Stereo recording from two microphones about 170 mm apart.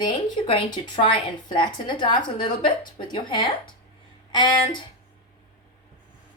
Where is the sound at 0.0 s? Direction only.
30° left (ahead or behind).